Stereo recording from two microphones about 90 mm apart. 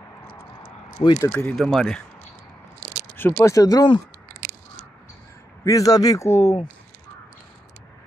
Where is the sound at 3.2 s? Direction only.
25° left (ahead or behind); by 3.9 s 45° left (ahead or behind).